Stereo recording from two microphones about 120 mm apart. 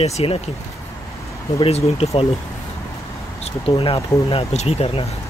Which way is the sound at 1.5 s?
55° left (ahead or behind).